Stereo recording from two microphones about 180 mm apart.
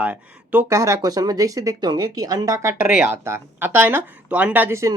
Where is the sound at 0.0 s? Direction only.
10° right (ahead or behind).